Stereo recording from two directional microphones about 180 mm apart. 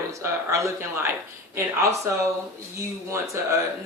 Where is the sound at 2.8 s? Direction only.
15° right (ahead or behind).